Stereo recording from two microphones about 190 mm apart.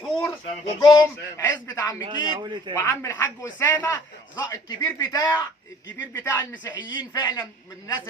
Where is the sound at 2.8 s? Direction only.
15° left (ahead or behind).